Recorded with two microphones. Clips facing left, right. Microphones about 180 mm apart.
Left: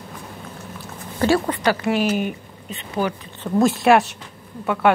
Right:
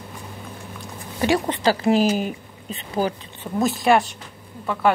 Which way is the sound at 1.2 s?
20° right (ahead or behind).